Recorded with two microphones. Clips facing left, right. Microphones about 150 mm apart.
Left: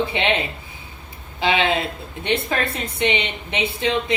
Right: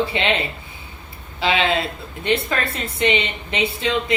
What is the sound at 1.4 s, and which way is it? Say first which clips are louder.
A woman's voice: even; 20° left (ahead or behind).